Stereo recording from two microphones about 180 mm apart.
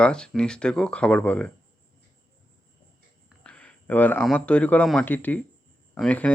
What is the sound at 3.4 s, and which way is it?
Speech, 5° left (ahead or behind).